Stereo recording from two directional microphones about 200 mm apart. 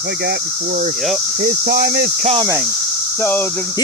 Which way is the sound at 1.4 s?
45° right (ahead or behind).